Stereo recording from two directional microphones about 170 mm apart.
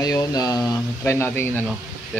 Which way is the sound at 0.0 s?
20° left (ahead or behind).